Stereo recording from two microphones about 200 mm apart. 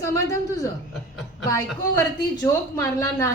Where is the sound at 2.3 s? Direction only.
15° left (ahead or behind).